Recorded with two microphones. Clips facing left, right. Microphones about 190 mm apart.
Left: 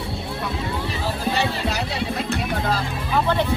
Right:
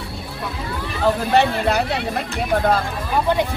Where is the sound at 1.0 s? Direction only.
60° right (ahead or behind).